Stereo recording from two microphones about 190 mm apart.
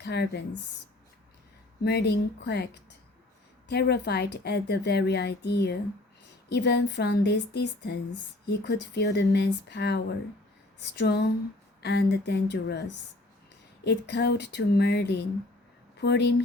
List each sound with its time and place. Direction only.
0.0 s a woman's voice: 60° left (ahead or behind)
1.8 s a woman's voice: 60° left (ahead or behind)
13.8 s a woman's voice: 60° left (ahead or behind)